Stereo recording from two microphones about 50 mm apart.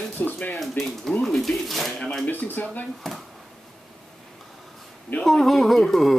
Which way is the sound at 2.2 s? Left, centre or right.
Left.